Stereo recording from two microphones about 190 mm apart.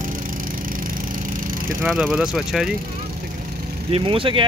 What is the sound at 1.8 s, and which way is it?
Speech, 5° right (ahead or behind).